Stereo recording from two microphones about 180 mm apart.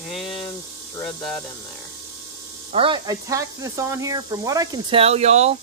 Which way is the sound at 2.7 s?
30° right (ahead or behind).